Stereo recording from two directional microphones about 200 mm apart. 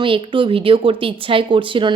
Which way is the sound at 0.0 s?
25° right (ahead or behind).